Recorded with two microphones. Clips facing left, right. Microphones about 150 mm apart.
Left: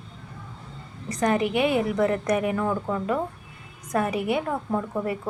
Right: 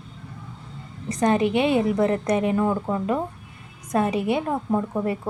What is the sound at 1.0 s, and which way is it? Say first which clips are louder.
A woman's voice: right 3 dB; 25° right (ahead or behind).